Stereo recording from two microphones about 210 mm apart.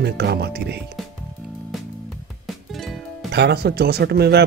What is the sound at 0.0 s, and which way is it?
Speech, 50° right (ahead or behind).